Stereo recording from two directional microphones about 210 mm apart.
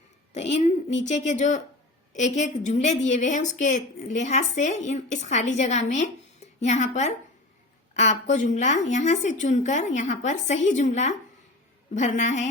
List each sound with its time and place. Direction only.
0.3 s a woman's voice: 35° left (ahead or behind)